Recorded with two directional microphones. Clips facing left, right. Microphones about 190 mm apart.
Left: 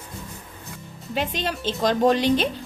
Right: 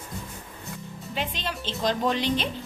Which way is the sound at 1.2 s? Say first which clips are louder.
Left 6 dB; 45° left (ahead or behind).